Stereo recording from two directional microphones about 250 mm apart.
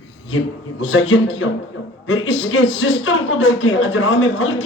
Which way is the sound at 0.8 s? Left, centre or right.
Left.